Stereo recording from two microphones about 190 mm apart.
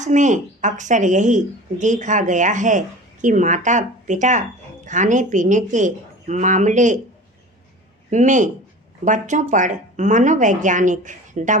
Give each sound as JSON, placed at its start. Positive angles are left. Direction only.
{"t": 0.0, "sound": "a woman's voice", "side_deg": -40}
{"t": 8.1, "sound": "a woman's voice", "side_deg": -40}